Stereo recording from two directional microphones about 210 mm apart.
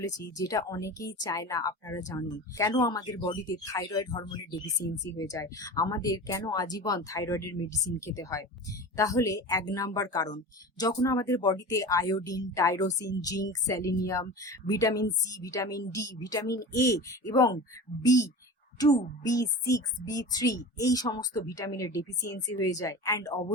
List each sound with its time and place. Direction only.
0.3 s speech: 15° left (ahead or behind)
4.8 s speech: 45° left (ahead or behind)
5.1 s speech: 15° left (ahead or behind)